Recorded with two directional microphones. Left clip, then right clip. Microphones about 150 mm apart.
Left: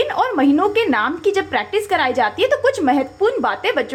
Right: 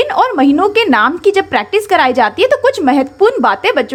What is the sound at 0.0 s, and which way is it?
Speech, 25° right (ahead or behind).